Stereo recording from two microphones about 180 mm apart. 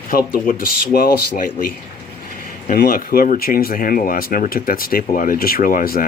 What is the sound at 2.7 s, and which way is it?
Speech, 50° left (ahead or behind).